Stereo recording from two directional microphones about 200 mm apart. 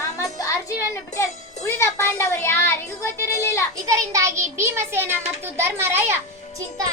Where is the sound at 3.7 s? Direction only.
15° right (ahead or behind).